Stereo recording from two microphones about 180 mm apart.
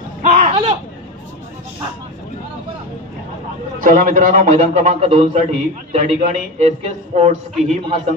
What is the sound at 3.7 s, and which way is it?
A man's voice, 50° right (ahead or behind).